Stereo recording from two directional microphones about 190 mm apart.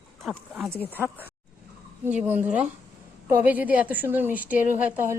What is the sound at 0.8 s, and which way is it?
Speech, 10° left (ahead or behind).